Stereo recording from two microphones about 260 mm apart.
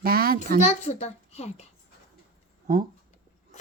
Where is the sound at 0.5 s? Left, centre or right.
Left.